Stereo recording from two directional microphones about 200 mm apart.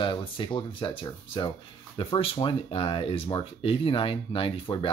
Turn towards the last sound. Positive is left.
turn(degrees=25)  # may be behind; listen again after turning